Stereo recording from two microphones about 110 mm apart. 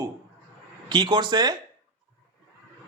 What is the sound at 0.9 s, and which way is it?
Speech, 40° right (ahead or behind).